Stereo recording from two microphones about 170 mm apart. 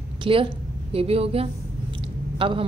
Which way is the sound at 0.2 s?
30° right (ahead or behind).